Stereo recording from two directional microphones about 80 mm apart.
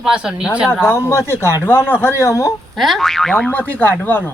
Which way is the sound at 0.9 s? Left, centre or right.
Left.